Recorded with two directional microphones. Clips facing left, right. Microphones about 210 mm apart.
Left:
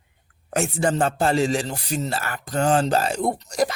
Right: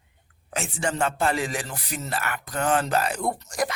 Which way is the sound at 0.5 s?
40° left (ahead or behind).